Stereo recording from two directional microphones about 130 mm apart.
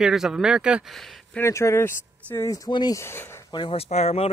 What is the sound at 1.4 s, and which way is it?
Speech, 20° left (ahead or behind).